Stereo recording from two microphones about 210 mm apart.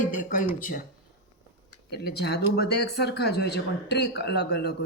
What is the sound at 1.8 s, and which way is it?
Speech, 50° left (ahead or behind).